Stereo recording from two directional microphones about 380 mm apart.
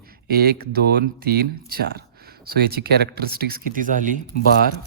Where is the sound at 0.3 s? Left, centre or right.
Right.